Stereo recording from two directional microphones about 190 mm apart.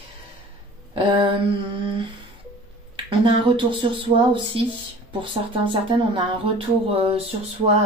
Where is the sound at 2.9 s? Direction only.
25° right (ahead or behind).